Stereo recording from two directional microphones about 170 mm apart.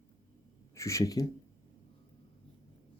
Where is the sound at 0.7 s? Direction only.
15° left (ahead or behind).